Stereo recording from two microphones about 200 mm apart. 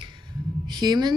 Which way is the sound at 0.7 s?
20° right (ahead or behind).